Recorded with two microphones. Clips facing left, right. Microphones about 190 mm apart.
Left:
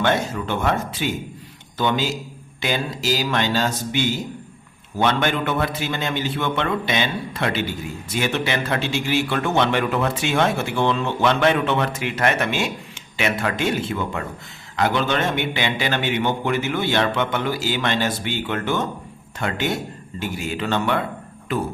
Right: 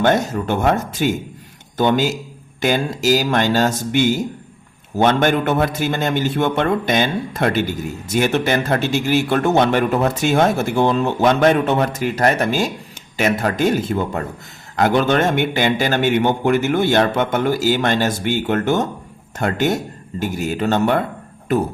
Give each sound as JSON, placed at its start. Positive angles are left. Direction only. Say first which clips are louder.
{"t": 0.0, "sound": "speech", "louder": "right 4 dB", "side_deg": -45}